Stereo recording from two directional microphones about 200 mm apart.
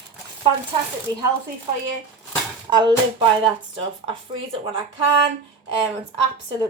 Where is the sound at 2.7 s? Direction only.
20° right (ahead or behind).